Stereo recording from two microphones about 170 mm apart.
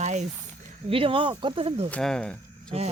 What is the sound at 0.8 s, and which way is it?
Speech, 30° right (ahead or behind).